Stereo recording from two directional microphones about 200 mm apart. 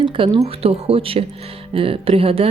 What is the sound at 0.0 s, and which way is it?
A woman's voice, 25° right (ahead or behind).